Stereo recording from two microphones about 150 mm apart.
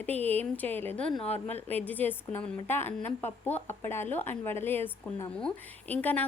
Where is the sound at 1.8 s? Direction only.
10° left (ahead or behind).